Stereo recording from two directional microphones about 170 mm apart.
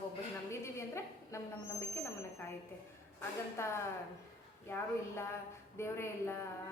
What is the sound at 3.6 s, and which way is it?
A woman's voice, 15° left (ahead or behind).